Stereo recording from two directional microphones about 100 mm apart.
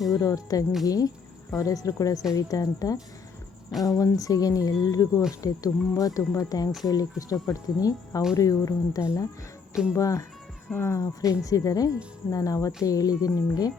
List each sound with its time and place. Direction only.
0.1 s speech: 35° left (ahead or behind)